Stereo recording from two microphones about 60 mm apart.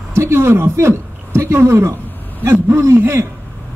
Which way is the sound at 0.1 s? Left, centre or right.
Right.